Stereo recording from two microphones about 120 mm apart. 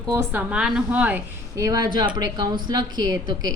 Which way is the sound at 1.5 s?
25° right (ahead or behind).